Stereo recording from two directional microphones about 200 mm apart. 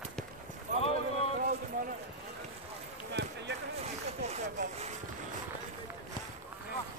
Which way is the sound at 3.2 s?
60° right (ahead or behind).